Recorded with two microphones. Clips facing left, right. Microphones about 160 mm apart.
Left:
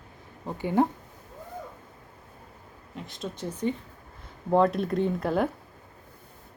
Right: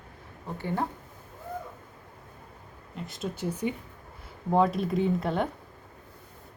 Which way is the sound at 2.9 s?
Centre (ahead or behind).